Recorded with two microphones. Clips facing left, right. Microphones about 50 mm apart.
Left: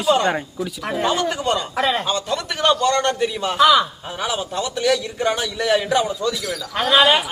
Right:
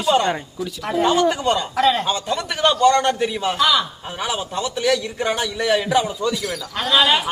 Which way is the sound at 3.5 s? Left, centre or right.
Centre.